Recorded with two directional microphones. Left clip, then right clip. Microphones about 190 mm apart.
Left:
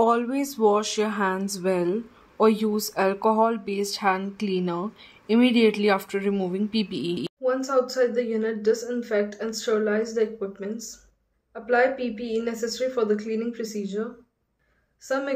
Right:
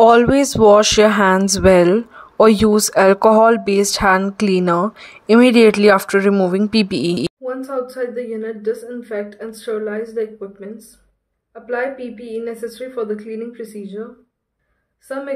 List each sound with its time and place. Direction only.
0.0 s speech: 50° right (ahead or behind)
7.4 s a woman's voice: centre (ahead or behind)
15.0 s a woman's voice: centre (ahead or behind)